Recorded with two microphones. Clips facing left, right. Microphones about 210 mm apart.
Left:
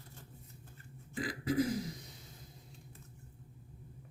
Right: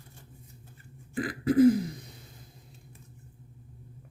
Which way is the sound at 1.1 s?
55° right (ahead or behind).